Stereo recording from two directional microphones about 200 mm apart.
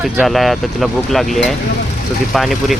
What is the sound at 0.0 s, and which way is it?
Speech, centre (ahead or behind).